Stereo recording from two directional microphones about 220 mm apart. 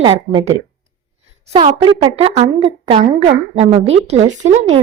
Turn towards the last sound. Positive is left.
turn(degrees=-30)  # may be behind; listen again after turning